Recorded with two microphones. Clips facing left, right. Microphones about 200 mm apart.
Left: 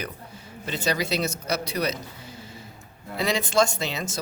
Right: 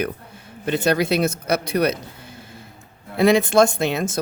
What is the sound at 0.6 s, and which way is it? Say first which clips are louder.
Speech: right 8 dB; 55° right (ahead or behind).